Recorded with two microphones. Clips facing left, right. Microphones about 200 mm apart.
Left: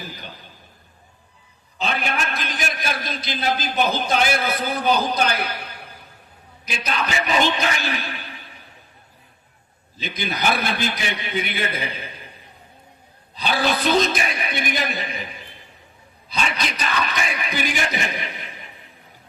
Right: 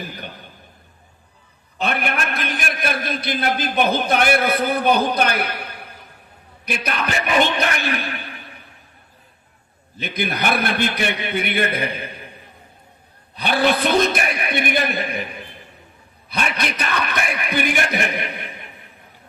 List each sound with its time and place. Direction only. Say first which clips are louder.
1.8 s a man's voice: right 2 dB; 60° right (ahead or behind)
10.0 s a man's voice: right 2 dB; 60° right (ahead or behind)
13.3 s a man's voice: right 3 dB; 60° right (ahead or behind)
16.3 s a man's voice: right 2 dB; 60° right (ahead or behind)